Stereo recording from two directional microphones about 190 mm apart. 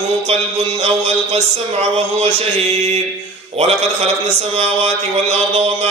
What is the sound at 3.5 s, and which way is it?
A man's voice, 30° right (ahead or behind).